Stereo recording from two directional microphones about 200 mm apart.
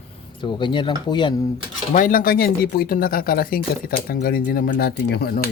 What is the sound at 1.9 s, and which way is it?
Speech, 45° left (ahead or behind).